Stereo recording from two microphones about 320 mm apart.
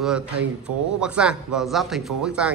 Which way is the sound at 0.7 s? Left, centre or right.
Right.